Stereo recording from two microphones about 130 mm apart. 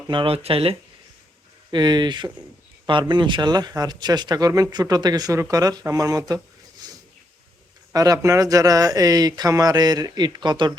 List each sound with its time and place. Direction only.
0.1 s speech: 45° right (ahead or behind)
1.7 s speech: 35° right (ahead or behind)
7.9 s speech: 25° right (ahead or behind)